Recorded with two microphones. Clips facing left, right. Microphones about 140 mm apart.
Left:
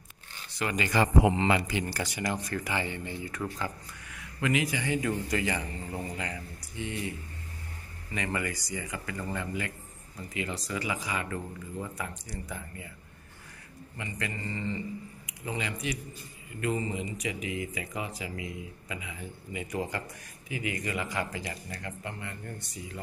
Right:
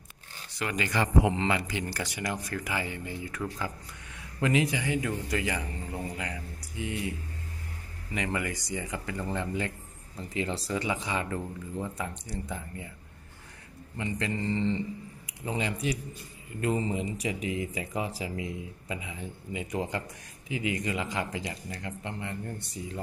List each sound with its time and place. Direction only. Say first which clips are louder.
0.6 s speech: left 2 dB; 5° left (ahead or behind)
1.0 s speech: left 1 dB; 15° left (ahead or behind); by 3.7 s 5° right (ahead or behind)
4.1 s a sound: right 2 dB; 30° right (ahead or behind)
4.8 s speech: left 1 dB; 5° right (ahead or behind)
8.1 s speech: right 1 dB; 15° right (ahead or behind)
13.9 s speech: right 5 dB; 25° right (ahead or behind)